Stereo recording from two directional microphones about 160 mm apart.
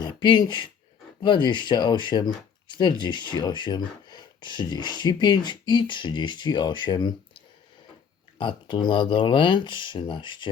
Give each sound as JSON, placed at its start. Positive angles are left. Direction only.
{"t": 0.0, "sound": "speech", "side_deg": 30}
{"t": 8.4, "sound": "speech", "side_deg": 30}